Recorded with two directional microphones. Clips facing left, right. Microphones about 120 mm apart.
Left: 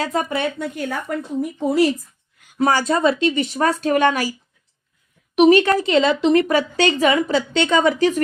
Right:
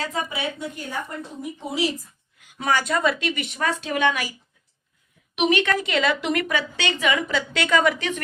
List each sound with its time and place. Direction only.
0.0 s a woman's voice: 55° left (ahead or behind)
2.6 s a woman's voice: 35° left (ahead or behind)
5.3 s a woman's voice: 40° left (ahead or behind)
6.5 s a woman's voice: 40° left (ahead or behind)